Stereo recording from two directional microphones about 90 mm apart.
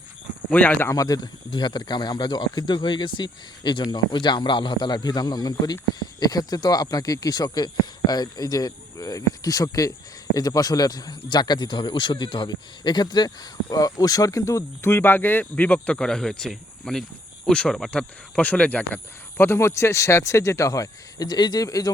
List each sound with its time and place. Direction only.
0.5 s speech: 20° left (ahead or behind)
0.9 s a man's voice: 40° left (ahead or behind)
1.5 s speech: 55° left (ahead or behind); by 18.9 s 15° left (ahead or behind)
19.4 s a man's voice: 30° left (ahead or behind)